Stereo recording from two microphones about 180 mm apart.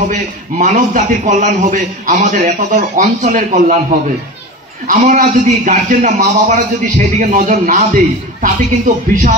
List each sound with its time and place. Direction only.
0.1 s a man's voice: 45° right (ahead or behind)
4.8 s a man's voice: 45° right (ahead or behind)